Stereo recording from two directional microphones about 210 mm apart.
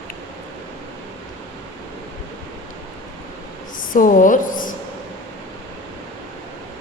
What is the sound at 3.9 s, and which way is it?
Speech, 40° left (ahead or behind).